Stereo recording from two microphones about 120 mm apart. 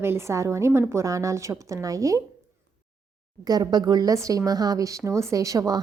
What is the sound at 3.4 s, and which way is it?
A woman's voice, 35° right (ahead or behind).